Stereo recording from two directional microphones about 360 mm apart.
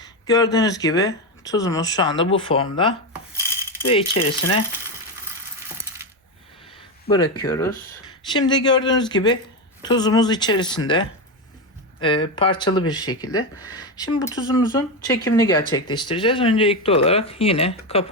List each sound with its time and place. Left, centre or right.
0.0 s speech: centre
7.1 s speech: centre